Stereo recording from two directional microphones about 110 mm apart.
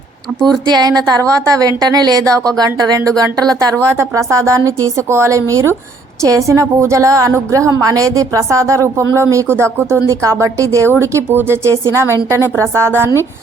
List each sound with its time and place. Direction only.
0.4 s a woman's voice: 40° right (ahead or behind)